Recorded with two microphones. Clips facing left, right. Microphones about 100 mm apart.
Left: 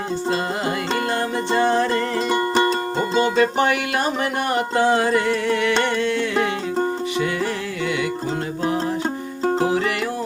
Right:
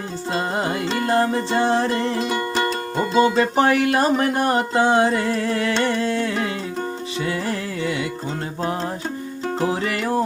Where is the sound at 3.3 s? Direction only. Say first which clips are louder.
Right 1 dB; 35° right (ahead or behind).